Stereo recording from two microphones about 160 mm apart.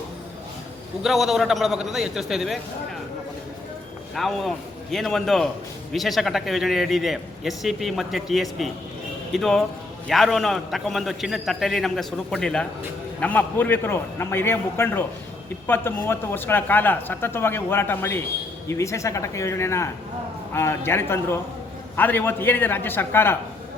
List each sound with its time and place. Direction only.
1.0 s a man's voice: centre (ahead or behind)
4.1 s a man's voice: centre (ahead or behind)